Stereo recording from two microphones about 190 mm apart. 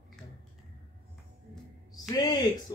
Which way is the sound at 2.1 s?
20° left (ahead or behind).